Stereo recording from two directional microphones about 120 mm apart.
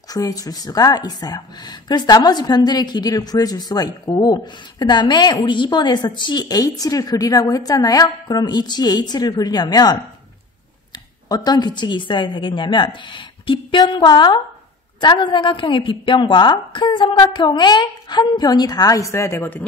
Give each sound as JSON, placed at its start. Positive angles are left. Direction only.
{"t": 0.1, "sound": "a woman's voice", "side_deg": 30}
{"t": 11.2, "sound": "a woman's voice", "side_deg": 35}